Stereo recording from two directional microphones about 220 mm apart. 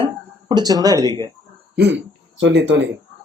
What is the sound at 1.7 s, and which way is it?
Speech, 50° right (ahead or behind).